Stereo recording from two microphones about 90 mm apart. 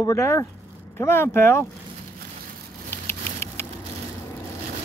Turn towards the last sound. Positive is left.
turn(degrees=30)  # may be behind; listen again after turning